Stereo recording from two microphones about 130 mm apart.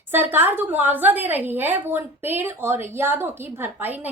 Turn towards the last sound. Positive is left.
turn(degrees=-15)  # may be behind; listen again after turning